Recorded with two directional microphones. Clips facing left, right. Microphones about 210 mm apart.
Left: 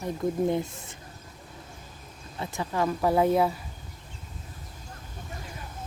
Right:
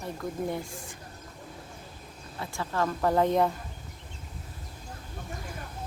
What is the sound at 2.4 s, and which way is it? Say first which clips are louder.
Speech: left 2 dB; 20° left (ahead or behind).